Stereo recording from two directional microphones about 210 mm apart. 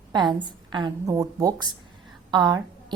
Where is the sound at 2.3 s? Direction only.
20° right (ahead or behind).